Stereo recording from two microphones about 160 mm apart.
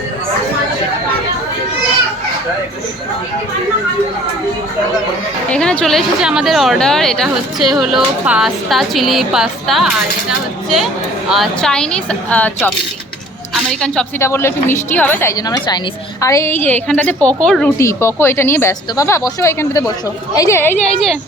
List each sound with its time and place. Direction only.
5.5 s a woman's voice: 5° left (ahead or behind)
14.2 s a woman's voice: 15° left (ahead or behind)
17.7 s a woman's voice: 20° left (ahead or behind)